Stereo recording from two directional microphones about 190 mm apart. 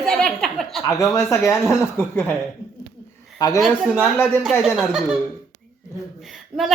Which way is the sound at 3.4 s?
20° left (ahead or behind).